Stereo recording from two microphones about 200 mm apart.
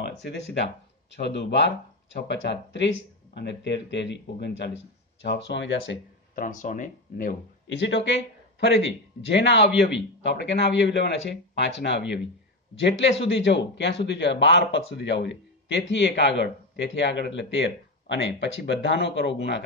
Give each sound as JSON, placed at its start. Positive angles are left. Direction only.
{"t": 0.0, "sound": "a sound", "side_deg": 60}
{"t": 1.1, "sound": "a man's voice", "side_deg": 60}
{"t": 6.3, "sound": "speech", "side_deg": 40}
{"t": 7.6, "sound": "a man's voice", "side_deg": 65}
{"t": 13.3, "sound": "a man's voice", "side_deg": 65}